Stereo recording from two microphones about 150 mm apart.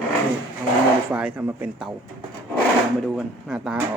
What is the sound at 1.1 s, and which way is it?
Speech, 5° right (ahead or behind).